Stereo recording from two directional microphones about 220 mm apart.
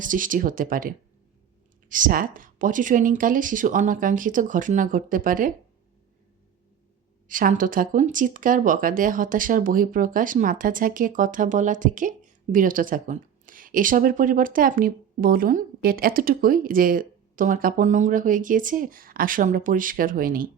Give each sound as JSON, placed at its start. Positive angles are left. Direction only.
{"t": 0.0, "sound": "speech", "side_deg": -35}
{"t": 7.3, "sound": "speech", "side_deg": -40}